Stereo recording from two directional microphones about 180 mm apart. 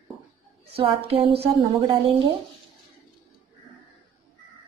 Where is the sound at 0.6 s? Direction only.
30° right (ahead or behind).